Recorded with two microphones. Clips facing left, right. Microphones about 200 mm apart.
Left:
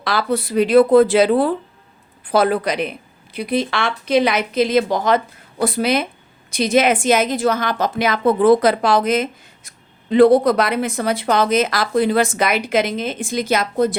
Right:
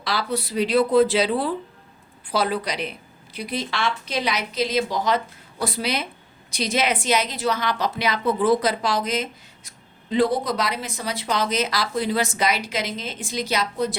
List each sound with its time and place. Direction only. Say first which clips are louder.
0.0 s a woman's voice: left 6 dB; 55° left (ahead or behind)